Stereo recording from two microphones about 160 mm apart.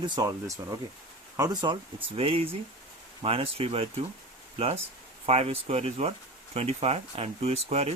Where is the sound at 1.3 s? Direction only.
25° right (ahead or behind).